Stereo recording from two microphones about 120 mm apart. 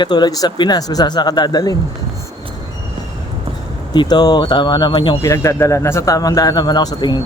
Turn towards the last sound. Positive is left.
turn(degrees=35)  # may be behind; listen again after turning